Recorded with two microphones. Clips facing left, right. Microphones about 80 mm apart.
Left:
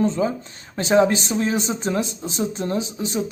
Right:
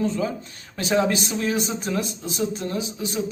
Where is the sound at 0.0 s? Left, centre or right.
Left.